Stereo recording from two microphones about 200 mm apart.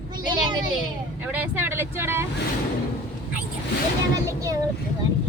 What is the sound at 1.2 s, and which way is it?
A woman's voice, 10° right (ahead or behind).